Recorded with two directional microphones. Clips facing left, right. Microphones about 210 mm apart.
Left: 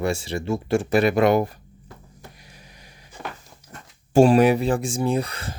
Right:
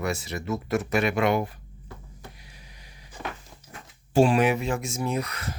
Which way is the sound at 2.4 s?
45° left (ahead or behind).